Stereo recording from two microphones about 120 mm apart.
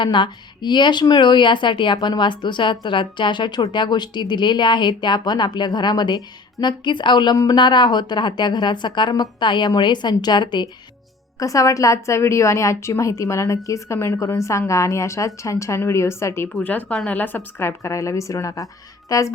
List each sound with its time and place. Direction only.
0.0 s speech: 40° left (ahead or behind)
11.3 s a woman's voice: 30° left (ahead or behind)